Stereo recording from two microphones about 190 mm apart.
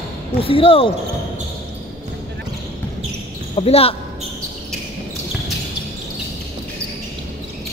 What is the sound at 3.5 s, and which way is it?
Speech, 30° left (ahead or behind).